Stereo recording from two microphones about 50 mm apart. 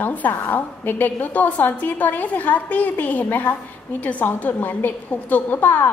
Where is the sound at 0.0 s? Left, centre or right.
Left.